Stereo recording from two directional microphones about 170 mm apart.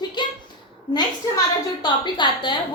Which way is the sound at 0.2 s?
25° left (ahead or behind).